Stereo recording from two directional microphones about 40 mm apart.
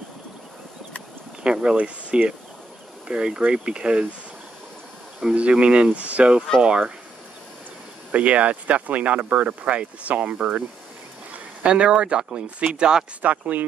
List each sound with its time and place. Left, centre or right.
1.4 s speech: right
5.3 s speech: right
8.1 s speech: right
11.6 s speech: right
13.2 s speech: right